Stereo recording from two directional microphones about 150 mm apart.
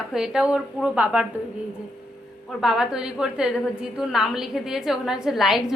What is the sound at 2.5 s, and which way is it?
A woman's voice, centre (ahead or behind).